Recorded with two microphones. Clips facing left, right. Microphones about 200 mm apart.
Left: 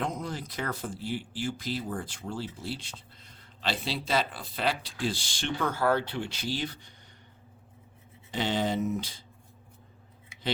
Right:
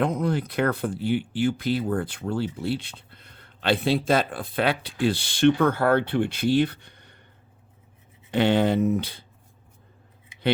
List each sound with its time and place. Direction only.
0.0 s speech: 60° right (ahead or behind)
8.3 s speech: 60° right (ahead or behind)